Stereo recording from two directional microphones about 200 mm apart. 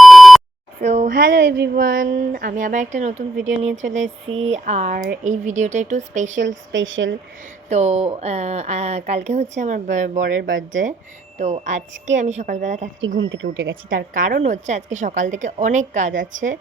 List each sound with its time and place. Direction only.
0.0 s beep: centre (ahead or behind)
0.8 s a sound: 35° right (ahead or behind)
1.3 s speech: 65° right (ahead or behind); by 3.8 s 35° right (ahead or behind)
4.0 s speech: 75° right (ahead or behind)
4.5 s speech: 35° right (ahead or behind)
6.5 s speech: 70° right (ahead or behind)
7.7 s speech: 35° right (ahead or behind)
13.0 s speech: 70° right (ahead or behind)
13.9 s speech: 40° right (ahead or behind)